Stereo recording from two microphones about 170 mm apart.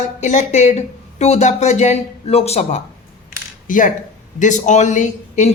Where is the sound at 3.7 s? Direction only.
50° left (ahead or behind).